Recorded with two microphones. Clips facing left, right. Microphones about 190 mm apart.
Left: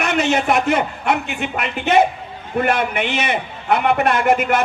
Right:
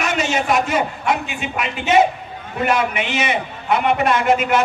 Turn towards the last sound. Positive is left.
turn(degrees=60)  # may be behind; listen again after turning